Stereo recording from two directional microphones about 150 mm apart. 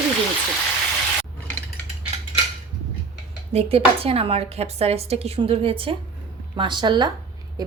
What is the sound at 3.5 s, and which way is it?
A woman's voice, 40° right (ahead or behind).